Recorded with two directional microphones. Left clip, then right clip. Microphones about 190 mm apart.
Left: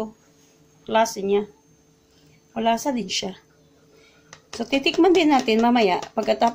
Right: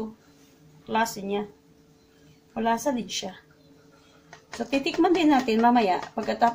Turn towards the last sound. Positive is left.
turn(degrees=35)  # may be behind; listen again after turning